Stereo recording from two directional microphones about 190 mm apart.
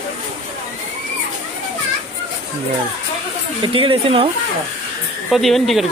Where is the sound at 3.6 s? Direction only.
25° right (ahead or behind).